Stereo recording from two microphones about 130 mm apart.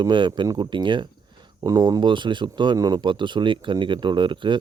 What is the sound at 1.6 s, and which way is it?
Speech, 25° right (ahead or behind).